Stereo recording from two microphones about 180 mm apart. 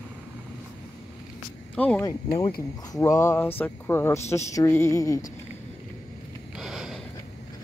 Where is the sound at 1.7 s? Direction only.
5° left (ahead or behind).